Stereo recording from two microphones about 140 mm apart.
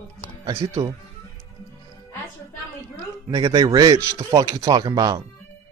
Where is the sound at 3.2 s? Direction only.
30° right (ahead or behind).